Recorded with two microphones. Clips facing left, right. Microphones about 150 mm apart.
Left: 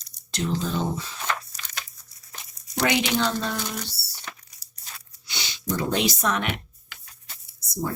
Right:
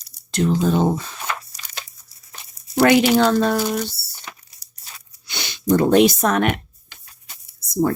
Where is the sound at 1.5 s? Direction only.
10° right (ahead or behind).